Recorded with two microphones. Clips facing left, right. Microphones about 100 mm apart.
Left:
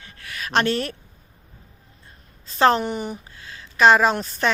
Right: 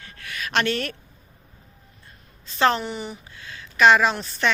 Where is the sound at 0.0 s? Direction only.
30° left (ahead or behind).